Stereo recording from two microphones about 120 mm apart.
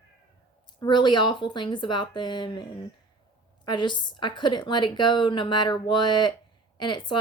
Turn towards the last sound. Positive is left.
turn(degrees=40)  # may be behind; listen again after turning